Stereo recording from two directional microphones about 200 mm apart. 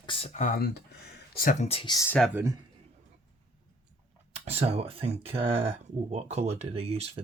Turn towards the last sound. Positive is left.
turn(degrees=-30)  # may be behind; listen again after turning